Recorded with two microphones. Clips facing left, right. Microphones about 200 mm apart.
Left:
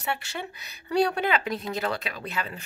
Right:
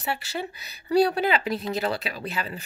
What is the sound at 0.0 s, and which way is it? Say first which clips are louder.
Speech: right 2 dB; 35° right (ahead or behind).